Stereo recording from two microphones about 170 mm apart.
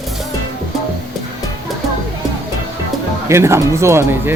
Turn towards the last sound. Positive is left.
turn(degrees=-15)  # may be behind; listen again after turning